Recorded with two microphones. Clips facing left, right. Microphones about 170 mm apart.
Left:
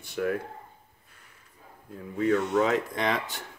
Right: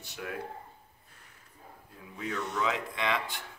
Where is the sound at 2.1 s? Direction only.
55° left (ahead or behind).